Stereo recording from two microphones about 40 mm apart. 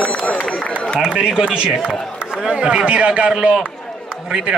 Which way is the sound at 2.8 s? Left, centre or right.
Right.